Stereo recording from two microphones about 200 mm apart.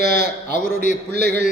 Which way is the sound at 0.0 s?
50° right (ahead or behind).